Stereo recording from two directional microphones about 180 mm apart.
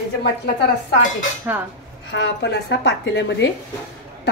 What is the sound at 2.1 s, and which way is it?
Speech, 70° left (ahead or behind).